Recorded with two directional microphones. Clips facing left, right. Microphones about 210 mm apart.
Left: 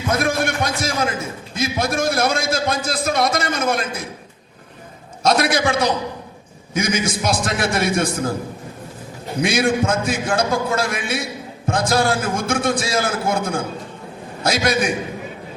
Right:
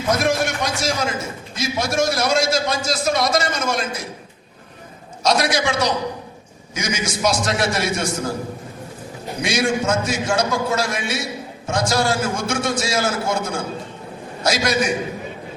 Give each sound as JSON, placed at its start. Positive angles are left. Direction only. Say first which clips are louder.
{"t": 0.1, "sound": "a man's voice", "louder": "right 1 dB", "side_deg": 55}
{"t": 5.2, "sound": "a man's voice", "louder": "left 2 dB", "side_deg": 55}
{"t": 9.4, "sound": "a man's voice", "louder": "left 3 dB", "side_deg": 55}